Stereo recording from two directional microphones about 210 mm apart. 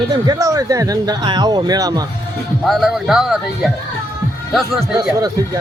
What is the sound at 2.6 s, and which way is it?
A man's voice, centre (ahead or behind).